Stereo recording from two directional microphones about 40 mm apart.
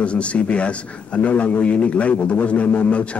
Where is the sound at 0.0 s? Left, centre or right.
Left.